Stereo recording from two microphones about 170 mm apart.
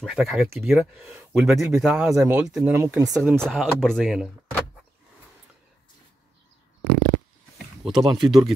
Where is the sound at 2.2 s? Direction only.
15° right (ahead or behind).